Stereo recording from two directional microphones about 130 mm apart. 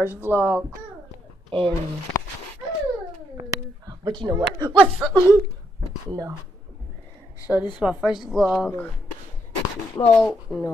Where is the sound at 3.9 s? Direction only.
35° right (ahead or behind).